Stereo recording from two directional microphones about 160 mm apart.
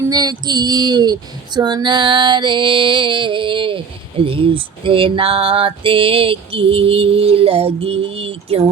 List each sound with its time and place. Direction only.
0.1 s female singing: 25° right (ahead or behind)
1.5 s music: 25° right (ahead or behind)